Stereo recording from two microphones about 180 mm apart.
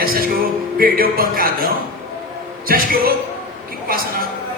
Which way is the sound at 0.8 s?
55° right (ahead or behind).